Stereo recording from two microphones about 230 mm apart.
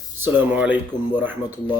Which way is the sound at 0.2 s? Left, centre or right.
Centre.